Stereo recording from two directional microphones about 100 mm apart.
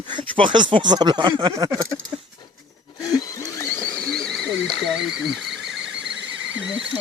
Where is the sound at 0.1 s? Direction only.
55° right (ahead or behind).